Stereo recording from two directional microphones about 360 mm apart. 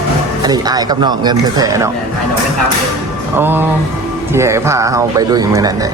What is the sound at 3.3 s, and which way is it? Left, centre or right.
A man's voice, centre.